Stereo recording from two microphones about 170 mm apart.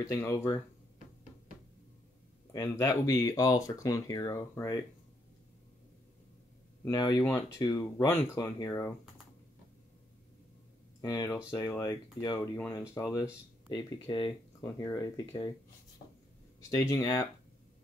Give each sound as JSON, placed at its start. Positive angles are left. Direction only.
{"t": 0.0, "sound": "speech", "side_deg": 15}
{"t": 2.5, "sound": "speech", "side_deg": 15}
{"t": 6.8, "sound": "speech", "side_deg": 20}
{"t": 11.0, "sound": "speech", "side_deg": 20}
{"t": 16.7, "sound": "speech", "side_deg": 20}